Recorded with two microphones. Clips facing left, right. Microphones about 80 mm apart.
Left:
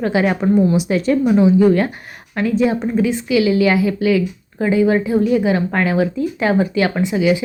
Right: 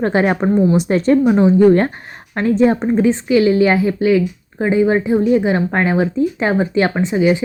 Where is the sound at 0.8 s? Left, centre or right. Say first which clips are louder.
Right 3 dB; right.